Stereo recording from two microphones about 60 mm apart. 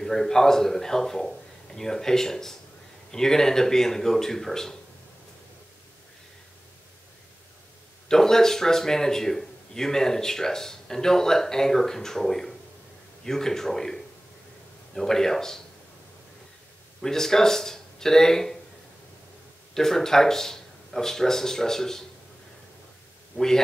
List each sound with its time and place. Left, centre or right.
0.0 s a man's voice: centre
8.1 s a man's voice: centre
17.0 s speech: centre
19.7 s speech: centre
23.3 s a man's voice: centre